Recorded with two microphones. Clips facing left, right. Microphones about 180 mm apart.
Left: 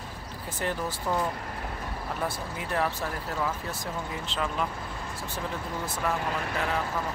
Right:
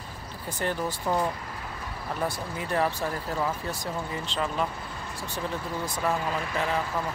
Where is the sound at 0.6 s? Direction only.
5° left (ahead or behind).